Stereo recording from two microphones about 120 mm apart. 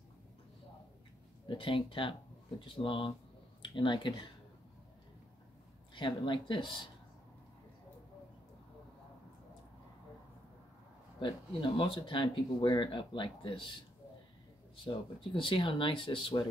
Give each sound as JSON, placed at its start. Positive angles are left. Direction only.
{"t": 1.5, "sound": "speech", "side_deg": 45}
{"t": 5.9, "sound": "speech", "side_deg": 40}
{"t": 11.1, "sound": "speech", "side_deg": 45}
{"t": 15.3, "sound": "speech", "side_deg": 45}